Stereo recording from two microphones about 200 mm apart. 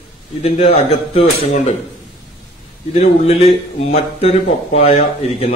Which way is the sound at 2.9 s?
30° left (ahead or behind).